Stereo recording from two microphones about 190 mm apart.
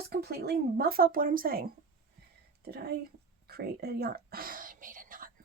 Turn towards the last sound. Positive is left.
turn(degrees=-45)  # may be behind; listen again after turning